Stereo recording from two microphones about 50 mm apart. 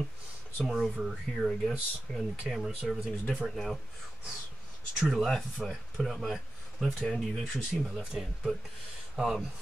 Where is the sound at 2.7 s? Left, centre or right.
Centre.